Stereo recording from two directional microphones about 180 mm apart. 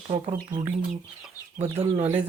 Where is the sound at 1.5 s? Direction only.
35° right (ahead or behind).